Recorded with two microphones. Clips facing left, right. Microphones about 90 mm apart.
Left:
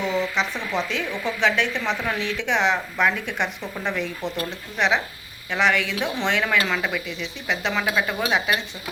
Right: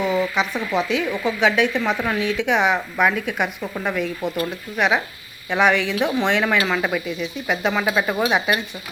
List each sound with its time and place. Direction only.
0.0 s speech: 10° right (ahead or behind)